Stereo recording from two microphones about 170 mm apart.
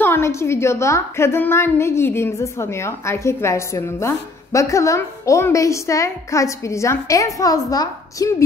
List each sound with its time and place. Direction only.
0.0 s a woman's voice: 15° left (ahead or behind)